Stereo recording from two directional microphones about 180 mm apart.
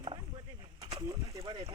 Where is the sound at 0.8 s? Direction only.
25° right (ahead or behind).